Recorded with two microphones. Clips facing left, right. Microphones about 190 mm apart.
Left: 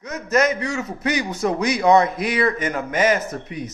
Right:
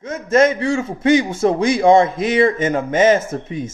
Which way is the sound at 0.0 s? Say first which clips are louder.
Right 5 dB; 25° right (ahead or behind).